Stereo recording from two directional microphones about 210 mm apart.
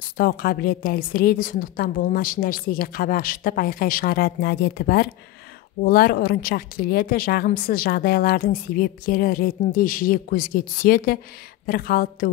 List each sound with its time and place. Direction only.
0.0 s a woman's voice: 45° left (ahead or behind)